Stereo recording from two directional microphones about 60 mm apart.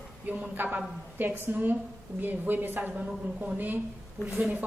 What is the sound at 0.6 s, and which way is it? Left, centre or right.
A woman's voice, right.